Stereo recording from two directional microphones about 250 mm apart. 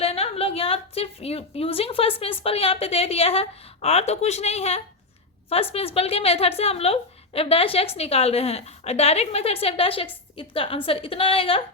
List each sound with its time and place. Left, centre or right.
0.0 s a woman's voice: left